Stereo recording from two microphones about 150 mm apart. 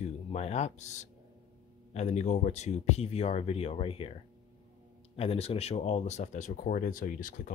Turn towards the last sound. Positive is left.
turn(degrees=60)  # may be behind; listen again after turning